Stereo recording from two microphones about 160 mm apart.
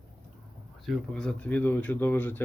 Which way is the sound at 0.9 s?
5° left (ahead or behind).